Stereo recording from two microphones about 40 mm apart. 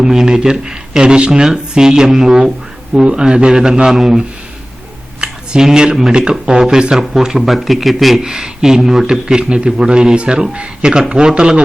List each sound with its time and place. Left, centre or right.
0.0 s a man's voice: centre
3.9 s a man's voice: centre
5.2 s a sound: right
5.6 s a man's voice: centre
8.2 s a man's voice: centre